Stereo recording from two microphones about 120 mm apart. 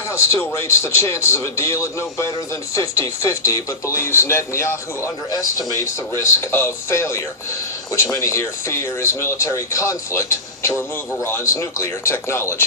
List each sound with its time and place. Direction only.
0.1 s speech: 25° left (ahead or behind)